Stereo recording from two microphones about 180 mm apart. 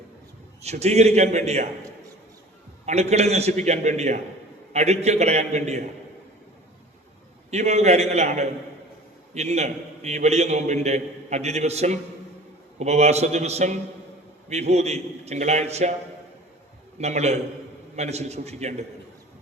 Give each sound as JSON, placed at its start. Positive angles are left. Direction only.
{"t": 0.6, "sound": "a man's voice", "side_deg": -35}
{"t": 2.8, "sound": "a man's voice", "side_deg": -40}
{"t": 7.5, "sound": "a man's voice", "side_deg": -40}
{"t": 17.0, "sound": "a man's voice", "side_deg": -40}